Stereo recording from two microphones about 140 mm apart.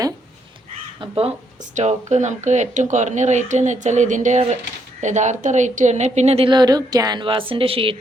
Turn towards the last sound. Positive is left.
turn(degrees=-40)  # may be behind; listen again after turning